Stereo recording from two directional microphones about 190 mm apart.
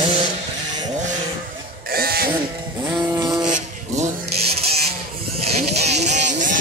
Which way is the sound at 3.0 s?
20° right (ahead or behind).